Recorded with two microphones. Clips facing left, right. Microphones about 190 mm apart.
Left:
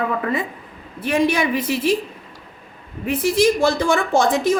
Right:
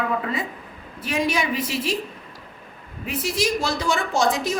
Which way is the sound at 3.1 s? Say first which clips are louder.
Left 7 dB; 55° left (ahead or behind).